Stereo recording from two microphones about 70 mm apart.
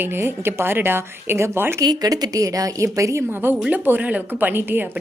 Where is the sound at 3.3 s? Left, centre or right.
Right.